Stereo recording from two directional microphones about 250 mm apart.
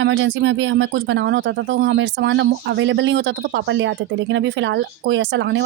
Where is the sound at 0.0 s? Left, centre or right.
Right.